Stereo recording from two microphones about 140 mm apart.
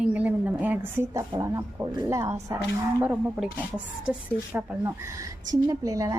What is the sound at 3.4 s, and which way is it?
A woman's voice, 10° right (ahead or behind).